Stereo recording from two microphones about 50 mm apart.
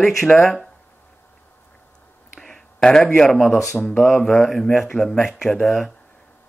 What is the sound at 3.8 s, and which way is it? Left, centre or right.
Speech, centre.